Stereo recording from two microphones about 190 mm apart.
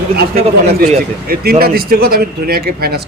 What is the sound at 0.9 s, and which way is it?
Speech, 55° right (ahead or behind).